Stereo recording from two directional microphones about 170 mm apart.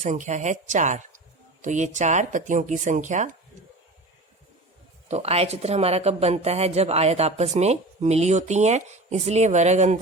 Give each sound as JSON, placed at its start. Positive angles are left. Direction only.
{"t": 0.0, "sound": "speech", "side_deg": -45}
{"t": 5.0, "sound": "speech", "side_deg": -40}